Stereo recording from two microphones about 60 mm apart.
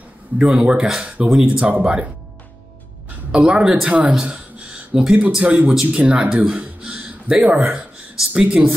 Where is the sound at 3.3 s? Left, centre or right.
Centre.